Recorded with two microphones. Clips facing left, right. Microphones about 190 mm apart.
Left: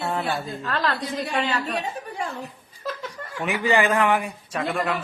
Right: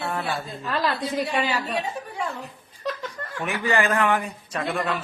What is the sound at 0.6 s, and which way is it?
A woman's voice, 10° right (ahead or behind).